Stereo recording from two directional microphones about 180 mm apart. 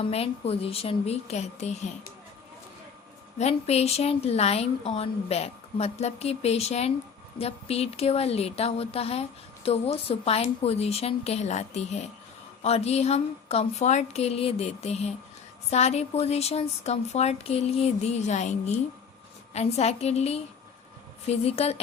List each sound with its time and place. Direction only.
0.0 s speech: 35° left (ahead or behind)
3.3 s speech: 35° left (ahead or behind)